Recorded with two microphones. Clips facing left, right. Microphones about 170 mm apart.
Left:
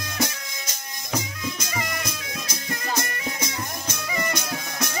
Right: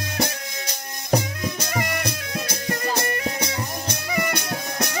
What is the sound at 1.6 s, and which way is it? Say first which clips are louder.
Music: right 4 dB; 60° right (ahead or behind).